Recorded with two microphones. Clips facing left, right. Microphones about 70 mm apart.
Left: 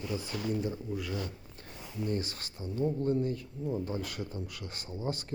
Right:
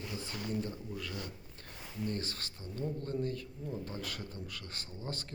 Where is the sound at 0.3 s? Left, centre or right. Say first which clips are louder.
Left 3 dB; centre.